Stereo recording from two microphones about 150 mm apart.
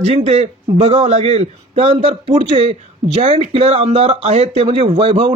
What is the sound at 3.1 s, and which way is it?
Speech, 50° right (ahead or behind).